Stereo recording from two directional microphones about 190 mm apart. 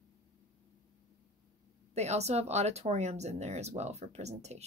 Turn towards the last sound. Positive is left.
turn(degrees=-35)  # may be behind; listen again after turning